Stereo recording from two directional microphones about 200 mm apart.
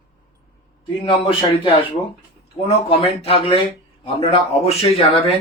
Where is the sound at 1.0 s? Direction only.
25° left (ahead or behind).